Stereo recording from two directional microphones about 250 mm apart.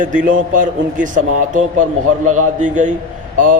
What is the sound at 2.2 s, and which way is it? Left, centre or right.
Speech, right.